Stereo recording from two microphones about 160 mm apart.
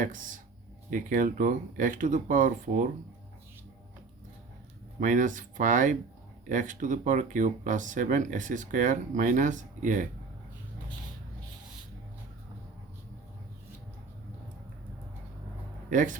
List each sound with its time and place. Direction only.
0.0 s speech: 55° right (ahead or behind)
4.9 s speech: 55° right (ahead or behind)
15.9 s speech: 55° right (ahead or behind)